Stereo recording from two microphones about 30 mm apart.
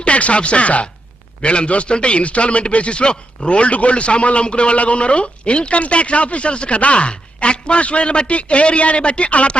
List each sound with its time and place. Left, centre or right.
0.0 s a man's voice: left